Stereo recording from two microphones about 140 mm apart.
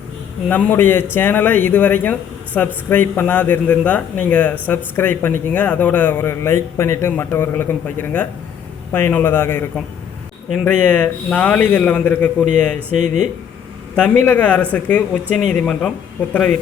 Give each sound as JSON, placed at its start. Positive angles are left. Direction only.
{"t": 0.5, "sound": "speech", "side_deg": 15}
{"t": 12.9, "sound": "speech", "side_deg": -65}
{"t": 13.9, "sound": "a man's voice", "side_deg": 5}